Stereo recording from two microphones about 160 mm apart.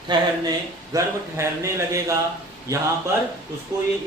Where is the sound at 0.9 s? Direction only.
15° right (ahead or behind).